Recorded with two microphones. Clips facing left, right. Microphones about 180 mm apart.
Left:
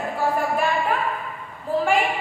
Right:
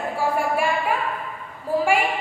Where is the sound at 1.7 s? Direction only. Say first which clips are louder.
Right 1 dB; 10° right (ahead or behind).